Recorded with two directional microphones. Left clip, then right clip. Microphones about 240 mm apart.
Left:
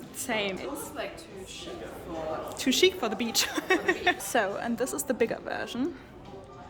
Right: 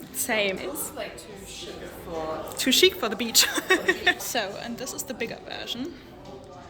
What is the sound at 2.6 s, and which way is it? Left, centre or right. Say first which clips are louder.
A woman's voice: right 4 dB; centre.